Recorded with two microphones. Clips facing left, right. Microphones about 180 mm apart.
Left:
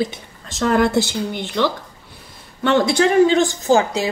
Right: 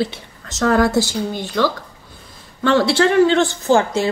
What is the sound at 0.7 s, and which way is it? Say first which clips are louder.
Speech: left 1 dB; 20° left (ahead or behind).